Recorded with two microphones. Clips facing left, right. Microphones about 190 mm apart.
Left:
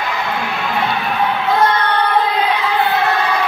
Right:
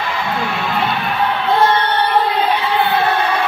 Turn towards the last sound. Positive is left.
turn(degrees=-30)  # may be behind; listen again after turning